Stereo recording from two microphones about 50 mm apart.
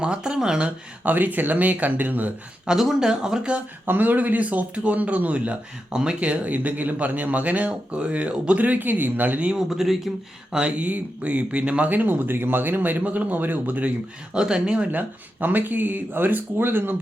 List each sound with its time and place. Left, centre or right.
0.0 s speech: centre
1.0 s a man's voice: right
2.6 s speech: centre
3.8 s a man's voice: right
5.9 s a man's voice: centre
8.6 s a man's voice: right
9.5 s speech: centre
10.5 s speech: right
11.9 s a man's voice: right
14.3 s speech: centre
14.9 s a man's voice: right